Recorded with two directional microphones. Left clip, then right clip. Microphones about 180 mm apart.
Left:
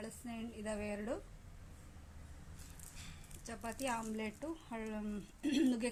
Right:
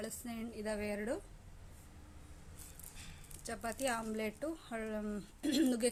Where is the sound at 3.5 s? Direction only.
20° right (ahead or behind).